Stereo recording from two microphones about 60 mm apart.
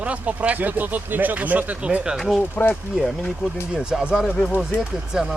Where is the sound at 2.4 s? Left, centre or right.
Left.